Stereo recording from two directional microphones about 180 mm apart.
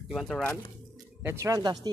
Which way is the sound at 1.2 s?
15° right (ahead or behind).